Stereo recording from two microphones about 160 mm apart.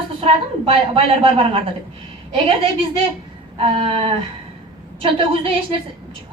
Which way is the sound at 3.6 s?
35° right (ahead or behind).